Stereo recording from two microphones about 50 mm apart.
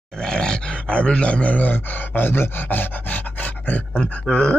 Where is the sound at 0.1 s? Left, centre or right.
Centre; by 3.8 s left.